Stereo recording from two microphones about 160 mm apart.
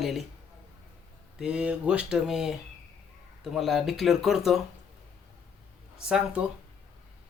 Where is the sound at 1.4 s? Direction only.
5° right (ahead or behind).